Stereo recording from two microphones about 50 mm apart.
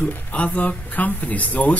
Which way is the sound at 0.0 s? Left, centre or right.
Left.